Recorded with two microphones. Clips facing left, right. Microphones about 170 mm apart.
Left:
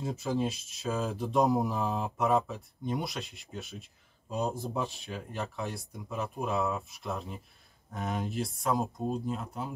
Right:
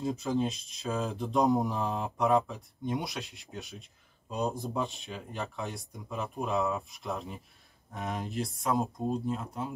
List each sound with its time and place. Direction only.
0.2 s speech: 5° left (ahead or behind)